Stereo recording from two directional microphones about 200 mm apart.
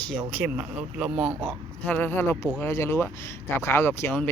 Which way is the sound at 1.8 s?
10° left (ahead or behind).